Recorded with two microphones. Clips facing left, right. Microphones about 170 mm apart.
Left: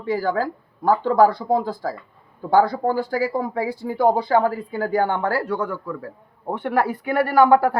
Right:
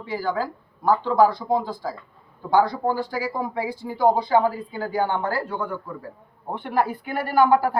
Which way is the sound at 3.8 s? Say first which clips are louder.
Left 1 dB; 55° left (ahead or behind).